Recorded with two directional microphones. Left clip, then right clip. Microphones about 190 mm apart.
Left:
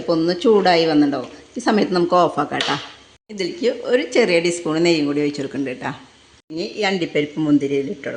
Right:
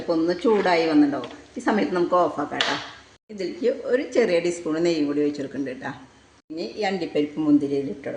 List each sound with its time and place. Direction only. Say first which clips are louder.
0.1 s speech: left 5 dB; 40° left (ahead or behind)